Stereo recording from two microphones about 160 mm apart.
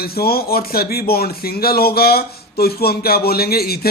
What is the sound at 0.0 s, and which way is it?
Speech, 75° left (ahead or behind).